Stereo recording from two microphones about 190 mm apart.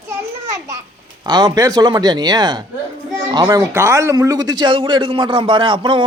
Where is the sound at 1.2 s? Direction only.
20° right (ahead or behind).